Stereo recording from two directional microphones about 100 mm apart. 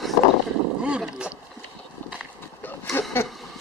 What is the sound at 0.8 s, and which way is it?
Speech, 10° right (ahead or behind).